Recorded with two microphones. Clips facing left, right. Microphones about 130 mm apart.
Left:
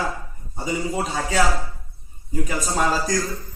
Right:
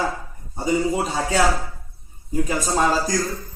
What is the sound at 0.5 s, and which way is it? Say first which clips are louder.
Speech: right 5 dB; 30° right (ahead or behind).